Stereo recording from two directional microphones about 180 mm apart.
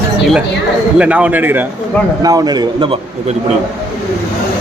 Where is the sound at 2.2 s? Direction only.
20° right (ahead or behind).